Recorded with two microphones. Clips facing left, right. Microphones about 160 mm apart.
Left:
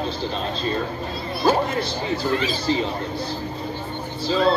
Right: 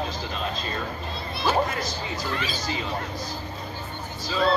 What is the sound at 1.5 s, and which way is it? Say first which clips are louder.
Speech: left 4 dB; 30° left (ahead or behind).